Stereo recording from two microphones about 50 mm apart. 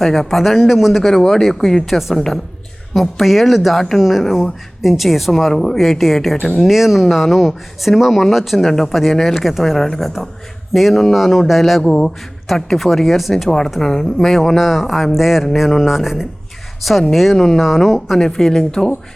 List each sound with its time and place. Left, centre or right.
0.0 s speech: centre
1.0 s speech: centre
11.9 s speech: centre
17.6 s speech: centre
18.2 s speech: centre